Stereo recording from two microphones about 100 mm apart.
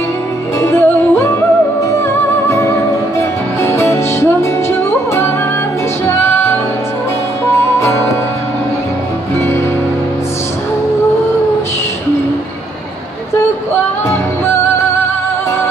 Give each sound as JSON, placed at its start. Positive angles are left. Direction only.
{"t": 0.6, "sound": "music", "side_deg": 25}
{"t": 2.4, "sound": "music", "side_deg": 30}
{"t": 7.8, "sound": "music", "side_deg": 25}